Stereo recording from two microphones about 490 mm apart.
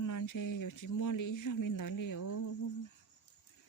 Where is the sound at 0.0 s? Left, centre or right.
Left.